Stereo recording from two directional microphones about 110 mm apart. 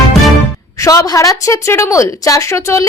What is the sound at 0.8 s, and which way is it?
Speech, 30° left (ahead or behind).